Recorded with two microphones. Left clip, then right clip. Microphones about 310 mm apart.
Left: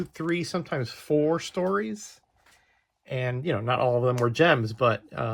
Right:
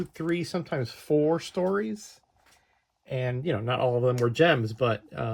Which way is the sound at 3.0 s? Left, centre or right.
Centre.